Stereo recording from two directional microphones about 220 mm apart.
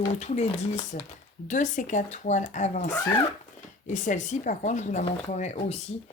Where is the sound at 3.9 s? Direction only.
35° left (ahead or behind).